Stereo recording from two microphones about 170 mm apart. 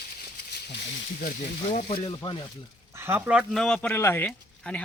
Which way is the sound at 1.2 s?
55° left (ahead or behind).